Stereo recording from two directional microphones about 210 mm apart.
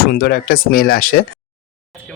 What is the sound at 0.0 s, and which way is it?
Speech, 50° left (ahead or behind).